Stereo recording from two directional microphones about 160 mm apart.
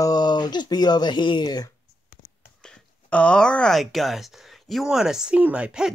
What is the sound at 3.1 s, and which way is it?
Speech, 5° left (ahead or behind).